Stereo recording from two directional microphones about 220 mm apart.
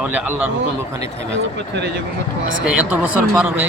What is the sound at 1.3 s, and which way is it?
Speech, 55° right (ahead or behind).